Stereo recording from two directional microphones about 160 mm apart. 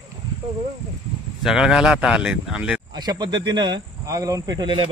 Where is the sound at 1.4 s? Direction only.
5° right (ahead or behind).